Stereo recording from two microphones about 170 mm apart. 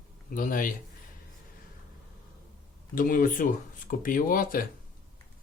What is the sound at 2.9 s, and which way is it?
Speech, 55° left (ahead or behind).